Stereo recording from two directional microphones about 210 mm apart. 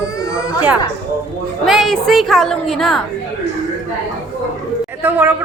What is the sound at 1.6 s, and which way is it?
A woman's voice, centre (ahead or behind).